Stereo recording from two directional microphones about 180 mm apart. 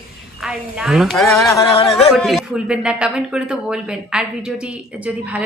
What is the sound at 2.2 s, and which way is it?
A man's voice, centre (ahead or behind).